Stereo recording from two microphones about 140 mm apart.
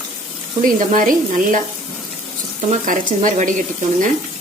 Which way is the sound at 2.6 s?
65° right (ahead or behind).